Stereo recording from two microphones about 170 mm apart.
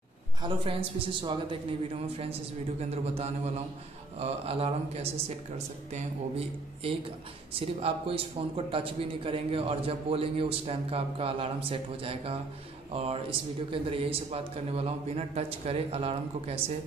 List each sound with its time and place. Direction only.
0.4 s a man's voice: 30° right (ahead or behind)
2.8 s a man's voice: 40° right (ahead or behind)